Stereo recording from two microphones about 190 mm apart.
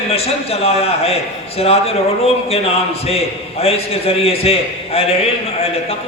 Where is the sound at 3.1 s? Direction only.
30° left (ahead or behind).